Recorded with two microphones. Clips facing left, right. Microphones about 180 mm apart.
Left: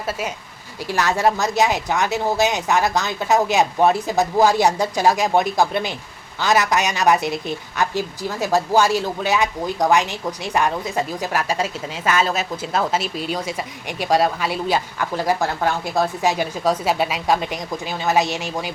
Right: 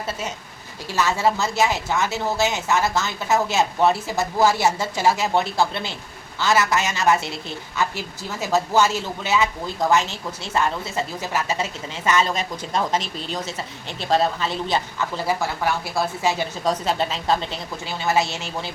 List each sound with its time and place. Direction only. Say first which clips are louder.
0.9 s a woman's voice: left 2 dB; 15° left (ahead or behind)